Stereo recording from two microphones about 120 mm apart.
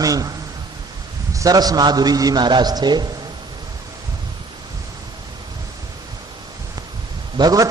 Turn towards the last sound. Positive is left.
turn(degrees=-30)  # may be behind; listen again after turning